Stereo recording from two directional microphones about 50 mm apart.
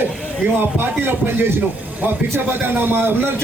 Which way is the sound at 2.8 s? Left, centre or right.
Right.